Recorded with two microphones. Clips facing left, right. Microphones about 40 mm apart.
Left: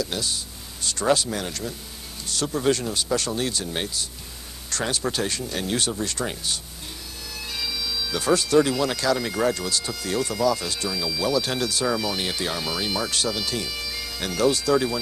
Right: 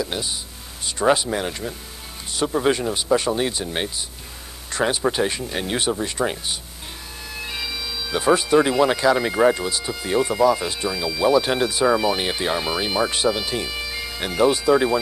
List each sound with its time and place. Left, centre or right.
0.0 s speech: centre